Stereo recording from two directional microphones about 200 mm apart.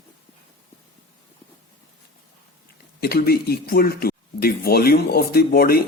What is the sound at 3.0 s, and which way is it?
Speech, 50° left (ahead or behind).